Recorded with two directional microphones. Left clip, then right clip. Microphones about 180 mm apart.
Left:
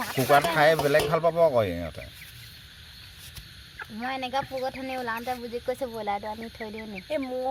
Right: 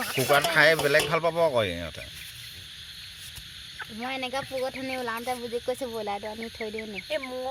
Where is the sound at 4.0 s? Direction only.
45° right (ahead or behind).